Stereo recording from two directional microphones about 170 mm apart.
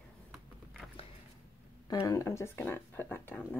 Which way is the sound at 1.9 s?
20° left (ahead or behind).